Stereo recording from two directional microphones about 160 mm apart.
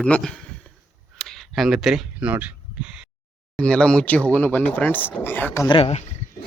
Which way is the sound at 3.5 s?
5° left (ahead or behind).